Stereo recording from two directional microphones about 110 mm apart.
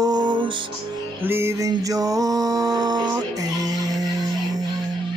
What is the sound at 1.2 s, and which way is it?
Music, 20° right (ahead or behind).